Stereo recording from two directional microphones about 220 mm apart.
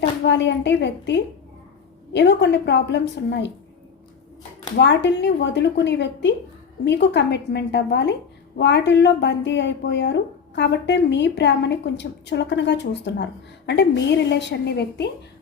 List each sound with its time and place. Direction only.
0.3 s speech: 55° left (ahead or behind)
4.8 s speech: 55° left (ahead or behind)